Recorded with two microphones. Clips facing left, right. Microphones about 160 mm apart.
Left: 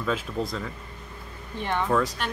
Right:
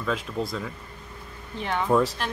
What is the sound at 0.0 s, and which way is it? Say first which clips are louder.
Speech: even; centre (ahead or behind).